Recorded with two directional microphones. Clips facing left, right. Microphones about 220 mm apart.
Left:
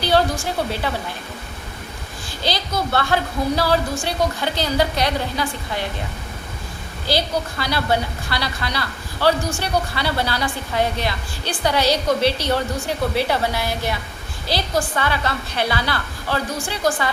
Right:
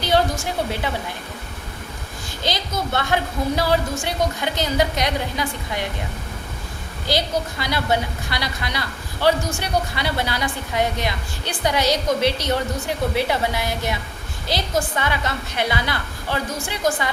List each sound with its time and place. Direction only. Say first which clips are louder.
2.4 s a woman's voice: left 2 dB; 20° right (ahead or behind)
7.6 s a woman's voice: left 2 dB; 20° right (ahead or behind)